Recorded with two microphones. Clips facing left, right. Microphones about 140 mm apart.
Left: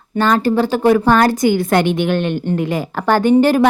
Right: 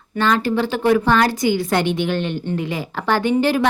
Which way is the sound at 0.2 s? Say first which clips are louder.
Left 4 dB; 40° left (ahead or behind).